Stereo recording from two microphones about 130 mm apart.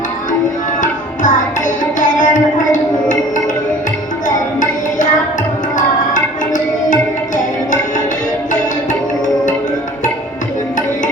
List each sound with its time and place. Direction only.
0.8 s music: 80° left
5.7 s tabla: 80° left